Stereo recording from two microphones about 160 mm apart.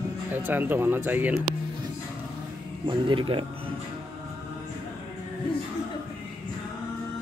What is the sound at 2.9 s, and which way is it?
Speech, 30° right (ahead or behind).